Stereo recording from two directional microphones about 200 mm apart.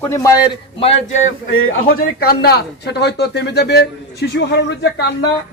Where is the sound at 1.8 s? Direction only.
50° left (ahead or behind).